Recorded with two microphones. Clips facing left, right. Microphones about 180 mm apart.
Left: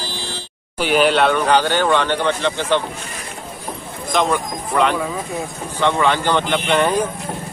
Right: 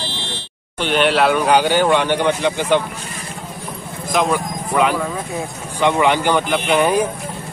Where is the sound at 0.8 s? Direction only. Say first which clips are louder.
Left 1 dB; 5° left (ahead or behind); by 2.8 s 15° right (ahead or behind).